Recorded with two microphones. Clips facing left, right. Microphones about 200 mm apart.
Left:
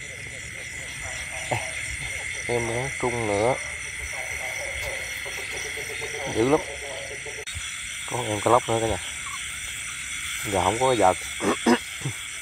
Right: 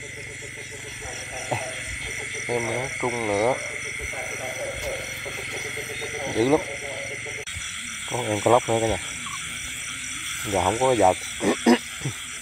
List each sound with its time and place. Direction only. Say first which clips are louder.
2.4 s speech: even; centre (ahead or behind)
6.2 s speech: right 1 dB; 5° right (ahead or behind)
8.1 s speech: right 2 dB; 20° right (ahead or behind)
10.5 s speech: right 1 dB; 10° right (ahead or behind)
11.5 s frog: right 3 dB; 15° right (ahead or behind)